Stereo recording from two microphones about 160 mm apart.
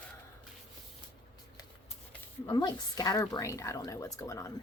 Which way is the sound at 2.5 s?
25° left (ahead or behind).